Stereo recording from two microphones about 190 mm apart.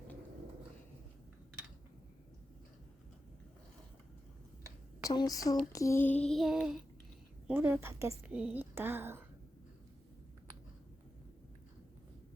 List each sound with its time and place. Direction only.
5.0 s speech: 20° left (ahead or behind)
5.7 s child singing: 15° left (ahead or behind); by 6.7 s centre (ahead or behind)
7.4 s a woman's voice: 10° right (ahead or behind)